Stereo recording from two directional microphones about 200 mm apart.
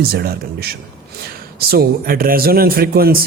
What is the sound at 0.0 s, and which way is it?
A man's voice, 50° right (ahead or behind).